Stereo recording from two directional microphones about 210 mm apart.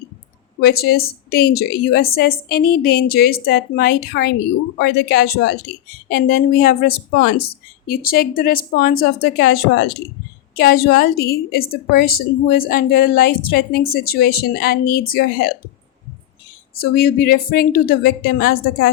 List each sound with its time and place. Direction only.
0.6 s a woman's voice: 50° left (ahead or behind)
16.9 s a woman's voice: 45° left (ahead or behind)